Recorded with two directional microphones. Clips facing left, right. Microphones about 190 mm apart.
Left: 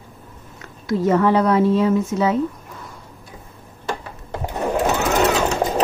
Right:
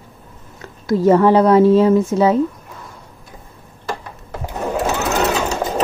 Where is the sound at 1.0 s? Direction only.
35° right (ahead or behind).